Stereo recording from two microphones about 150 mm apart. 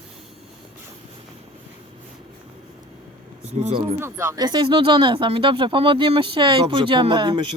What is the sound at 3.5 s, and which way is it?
Speech, 45° right (ahead or behind).